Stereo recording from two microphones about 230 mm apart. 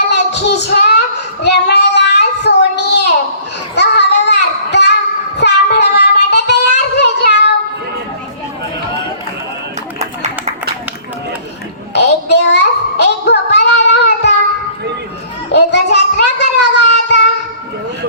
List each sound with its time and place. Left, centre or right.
0.1 s child singing: left
11.9 s child singing: left
15.5 s a sound: left